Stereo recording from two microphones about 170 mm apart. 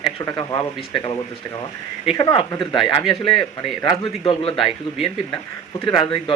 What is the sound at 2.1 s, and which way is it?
Speech, 25° left (ahead or behind).